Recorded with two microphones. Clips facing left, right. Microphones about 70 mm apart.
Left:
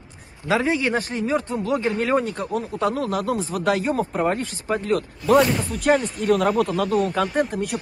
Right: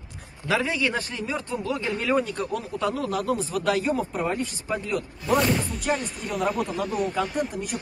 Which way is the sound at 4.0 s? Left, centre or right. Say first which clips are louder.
Left 4 dB; left.